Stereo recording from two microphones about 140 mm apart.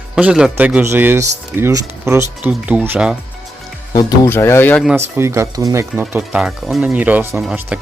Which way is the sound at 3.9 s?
30° left (ahead or behind).